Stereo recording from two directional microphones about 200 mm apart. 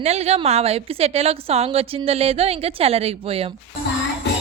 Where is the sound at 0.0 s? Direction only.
30° right (ahead or behind).